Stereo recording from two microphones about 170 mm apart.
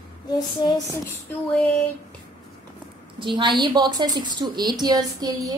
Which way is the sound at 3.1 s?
30° right (ahead or behind).